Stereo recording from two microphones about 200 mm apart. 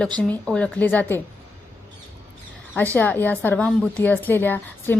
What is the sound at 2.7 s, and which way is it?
A woman's voice, 10° left (ahead or behind).